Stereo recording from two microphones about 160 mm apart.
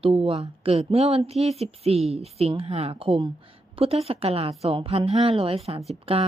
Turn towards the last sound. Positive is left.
turn(degrees=-40)  # may be behind; listen again after turning